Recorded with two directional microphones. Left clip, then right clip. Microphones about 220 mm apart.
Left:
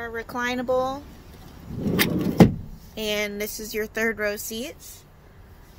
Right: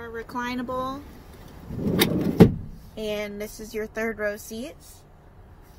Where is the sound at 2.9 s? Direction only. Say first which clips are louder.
Left 3 dB; 55° left (ahead or behind).